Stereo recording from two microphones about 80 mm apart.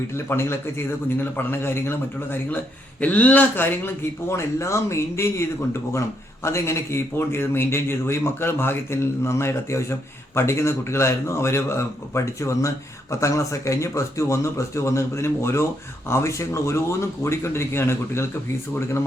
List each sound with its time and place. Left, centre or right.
0.3 s speech: left